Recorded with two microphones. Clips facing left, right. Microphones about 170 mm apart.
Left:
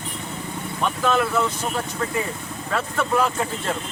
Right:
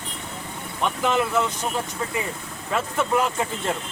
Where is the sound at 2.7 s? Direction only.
20° right (ahead or behind).